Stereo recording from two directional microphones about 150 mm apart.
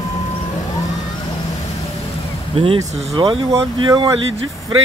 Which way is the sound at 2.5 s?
40° right (ahead or behind).